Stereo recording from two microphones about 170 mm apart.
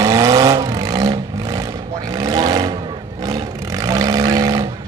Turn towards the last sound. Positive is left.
turn(degrees=-20)  # may be behind; listen again after turning